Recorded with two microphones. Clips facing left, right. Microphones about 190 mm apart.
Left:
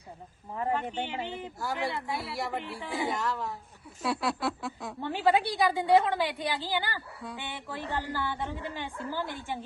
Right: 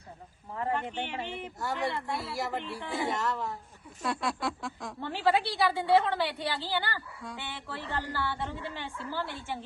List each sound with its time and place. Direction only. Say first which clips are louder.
0.5 s a woman's voice: left 1 dB; 15° left (ahead or behind)
1.5 s a woman's voice: right 1 dB; centre (ahead or behind)